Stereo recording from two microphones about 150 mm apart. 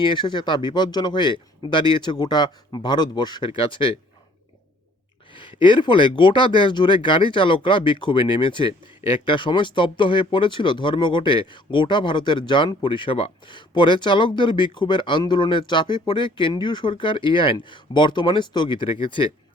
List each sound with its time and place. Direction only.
0.0 s speech: 30° left (ahead or behind)
5.3 s speech: 35° left (ahead or behind)